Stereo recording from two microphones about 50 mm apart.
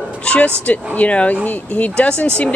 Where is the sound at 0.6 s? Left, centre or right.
Left.